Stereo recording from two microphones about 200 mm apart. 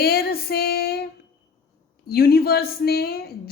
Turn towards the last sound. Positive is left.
turn(degrees=50)  # may be behind; listen again after turning